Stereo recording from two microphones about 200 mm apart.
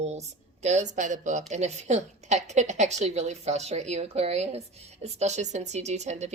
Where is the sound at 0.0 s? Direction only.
35° right (ahead or behind).